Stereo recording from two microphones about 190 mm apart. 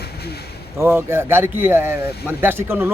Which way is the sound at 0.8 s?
15° right (ahead or behind).